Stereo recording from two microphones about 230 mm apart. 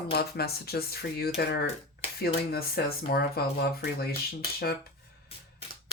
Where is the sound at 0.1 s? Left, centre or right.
Left.